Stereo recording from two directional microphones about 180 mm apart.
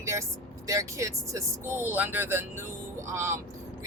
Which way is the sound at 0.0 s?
15° right (ahead or behind).